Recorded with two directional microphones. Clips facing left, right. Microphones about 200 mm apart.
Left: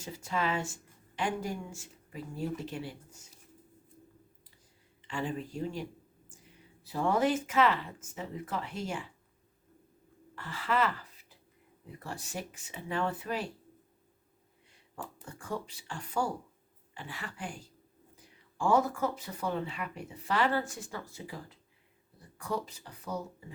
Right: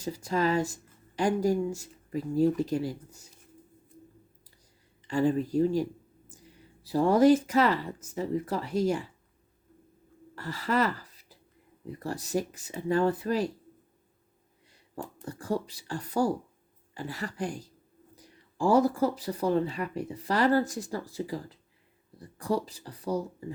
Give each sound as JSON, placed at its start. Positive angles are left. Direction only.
{"t": 0.0, "sound": "speech", "side_deg": -40}
{"t": 5.0, "sound": "speech", "side_deg": -40}
{"t": 10.3, "sound": "speech", "side_deg": -40}
{"t": 15.2, "sound": "speech", "side_deg": -35}